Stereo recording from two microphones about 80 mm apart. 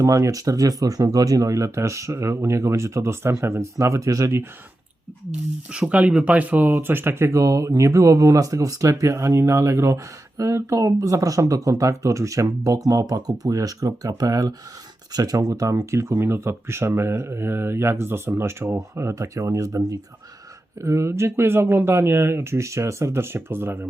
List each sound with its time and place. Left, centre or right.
0.0 s speech: right
5.7 s speech: centre; by 19.8 s right
20.8 s speech: right